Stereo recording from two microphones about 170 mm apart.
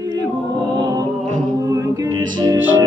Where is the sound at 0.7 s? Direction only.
25° right (ahead or behind).